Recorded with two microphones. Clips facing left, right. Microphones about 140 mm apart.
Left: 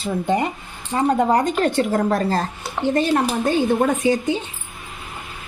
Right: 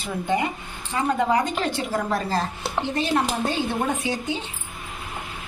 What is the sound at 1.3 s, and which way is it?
Speech, 50° left (ahead or behind).